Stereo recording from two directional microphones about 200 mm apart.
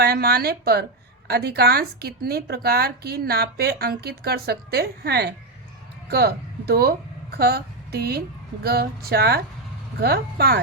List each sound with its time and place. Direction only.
0.0 s a woman's voice: 50° right (ahead or behind)